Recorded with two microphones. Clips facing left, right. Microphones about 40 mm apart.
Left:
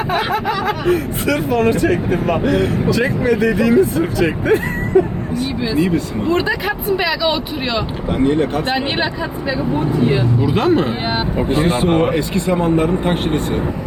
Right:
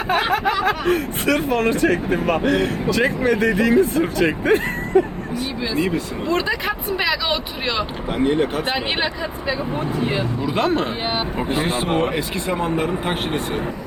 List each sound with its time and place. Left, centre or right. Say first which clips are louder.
0.1 s speech: right 1 dB; right
5.6 s speech: left 4 dB; centre
6.2 s speech: left 3 dB; centre
6.5 s speech: left 4 dB; centre
10.8 s speech: left 4 dB; centre
11.3 s speech: left 8 dB; centre
11.9 s speech: left 5 dB; centre
12.1 s speech: left 5 dB; centre